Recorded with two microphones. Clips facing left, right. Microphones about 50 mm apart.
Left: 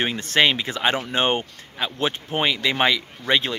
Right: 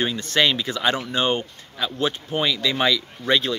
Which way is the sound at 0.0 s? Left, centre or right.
Left.